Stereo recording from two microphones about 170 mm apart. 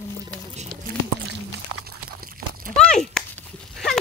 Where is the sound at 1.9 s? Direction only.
60° right (ahead or behind).